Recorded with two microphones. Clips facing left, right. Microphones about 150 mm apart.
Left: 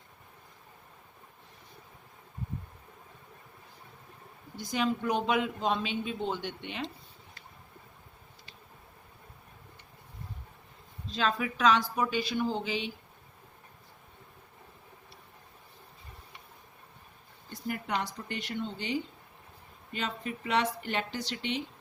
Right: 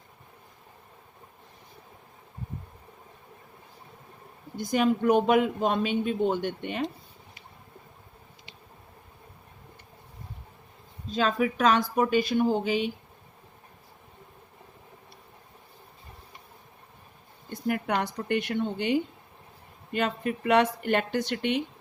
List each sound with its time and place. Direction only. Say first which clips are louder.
4.5 s a man's voice: right 6 dB; 50° right (ahead or behind)
11.1 s a man's voice: right 5 dB; 45° right (ahead or behind)
17.5 s speech: right 6 dB; 55° right (ahead or behind)